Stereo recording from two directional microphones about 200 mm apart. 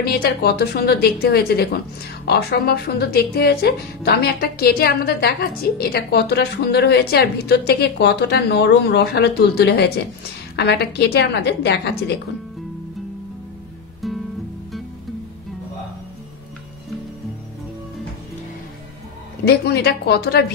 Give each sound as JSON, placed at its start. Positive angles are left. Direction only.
{"t": 0.0, "sound": "a woman's voice", "side_deg": 50}
{"t": 14.0, "sound": "music", "side_deg": 0}
{"t": 19.4, "sound": "speech", "side_deg": 55}